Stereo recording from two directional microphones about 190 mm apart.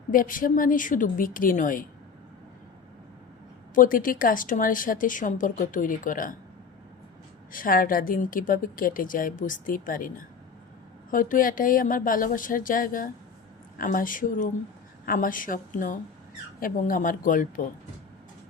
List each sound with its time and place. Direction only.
0.1 s speech: 45° left (ahead or behind)
3.8 s speech: 45° left (ahead or behind)
7.5 s speech: 45° left (ahead or behind)